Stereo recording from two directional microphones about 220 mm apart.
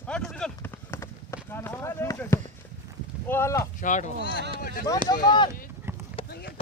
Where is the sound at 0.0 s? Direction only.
5° left (ahead or behind).